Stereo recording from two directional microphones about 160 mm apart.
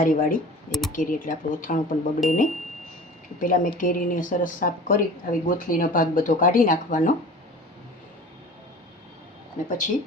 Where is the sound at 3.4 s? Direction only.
60° left (ahead or behind).